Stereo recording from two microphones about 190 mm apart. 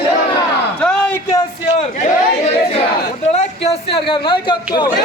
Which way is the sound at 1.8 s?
40° left (ahead or behind).